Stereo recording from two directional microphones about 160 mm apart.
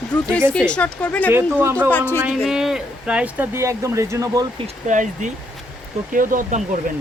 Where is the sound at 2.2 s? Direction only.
5° right (ahead or behind); by 4.4 s 20° right (ahead or behind).